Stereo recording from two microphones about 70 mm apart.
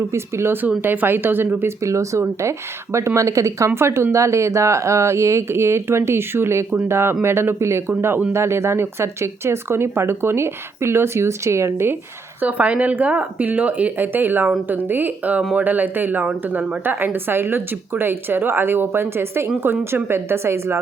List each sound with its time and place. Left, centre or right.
0.1 s speech: right
1.8 s speech: right
3.8 s speech: right
12.4 s speech: centre; by 20.7 s right